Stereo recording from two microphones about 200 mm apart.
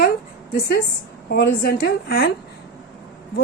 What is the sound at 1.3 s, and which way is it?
A woman's voice, 50° left (ahead or behind).